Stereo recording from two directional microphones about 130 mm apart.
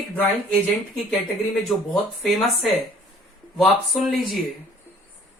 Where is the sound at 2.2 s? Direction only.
Centre (ahead or behind).